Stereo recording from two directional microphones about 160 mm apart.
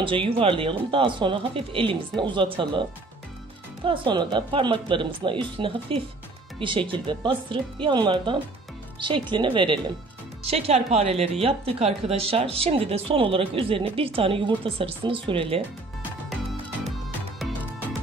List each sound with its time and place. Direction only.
0.0 s speech: 35° right (ahead or behind)